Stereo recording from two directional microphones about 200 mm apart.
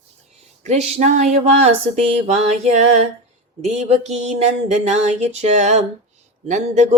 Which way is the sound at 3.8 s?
35° right (ahead or behind).